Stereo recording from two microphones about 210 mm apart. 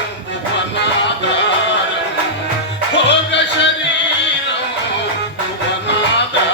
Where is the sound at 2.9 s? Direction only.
55° left (ahead or behind).